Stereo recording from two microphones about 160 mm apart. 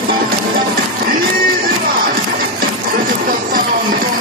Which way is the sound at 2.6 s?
65° right (ahead or behind).